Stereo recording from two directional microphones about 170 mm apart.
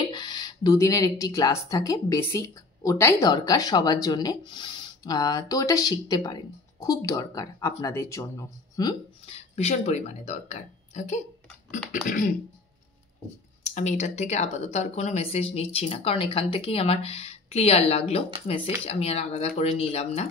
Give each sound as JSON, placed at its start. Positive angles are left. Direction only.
{"t": 0.1, "sound": "speech", "side_deg": 25}
{"t": 9.2, "sound": "speech", "side_deg": 40}
{"t": 13.7, "sound": "speech", "side_deg": 45}